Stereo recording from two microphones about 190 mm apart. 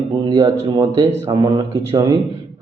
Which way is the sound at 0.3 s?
20° right (ahead or behind).